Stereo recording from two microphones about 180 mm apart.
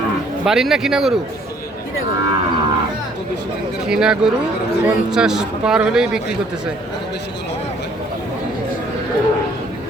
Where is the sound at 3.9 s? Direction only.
5° right (ahead or behind).